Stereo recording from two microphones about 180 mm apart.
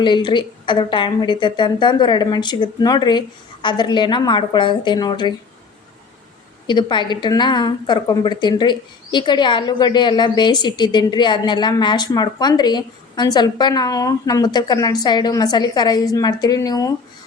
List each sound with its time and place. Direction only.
0.0 s a woman's voice: 25° left (ahead or behind)
6.7 s a woman's voice: 25° left (ahead or behind)